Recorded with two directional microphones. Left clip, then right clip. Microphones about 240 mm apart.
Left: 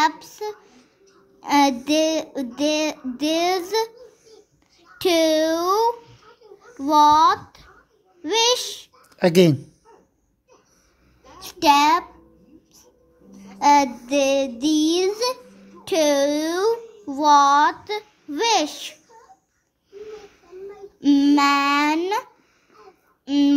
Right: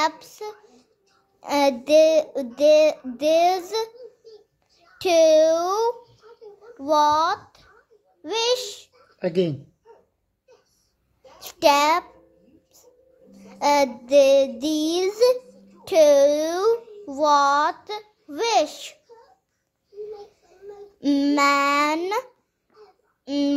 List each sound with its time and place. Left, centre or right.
0.0 s a sound: centre
1.4 s a child's voice: centre
4.9 s a child's voice: centre
9.2 s a woman's voice: left
11.4 s child singing: right
13.4 s a child's voice: centre
21.0 s child singing: right
23.2 s speech: centre